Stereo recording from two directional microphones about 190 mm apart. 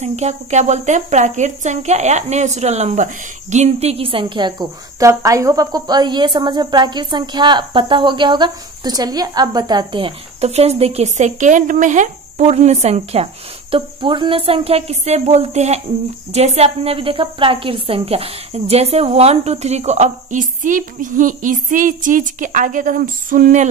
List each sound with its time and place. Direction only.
0.0 s speech: 35° right (ahead or behind)